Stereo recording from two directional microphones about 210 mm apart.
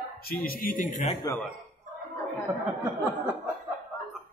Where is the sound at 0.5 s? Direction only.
40° left (ahead or behind).